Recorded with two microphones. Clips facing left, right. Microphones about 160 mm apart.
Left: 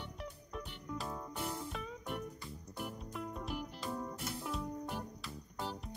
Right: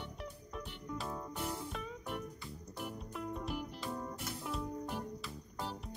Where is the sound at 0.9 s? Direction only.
Centre (ahead or behind).